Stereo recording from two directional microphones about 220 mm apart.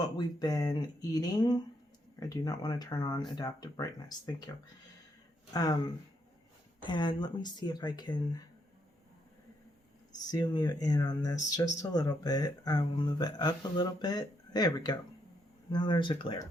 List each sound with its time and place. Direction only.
0.0 s speech: 20° left (ahead or behind)
10.3 s speech: 20° left (ahead or behind)